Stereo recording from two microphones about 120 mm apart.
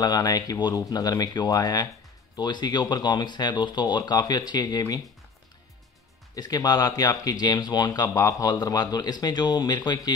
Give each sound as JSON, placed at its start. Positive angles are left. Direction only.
{"t": 0.0, "sound": "speech", "side_deg": 35}
{"t": 6.3, "sound": "speech", "side_deg": 35}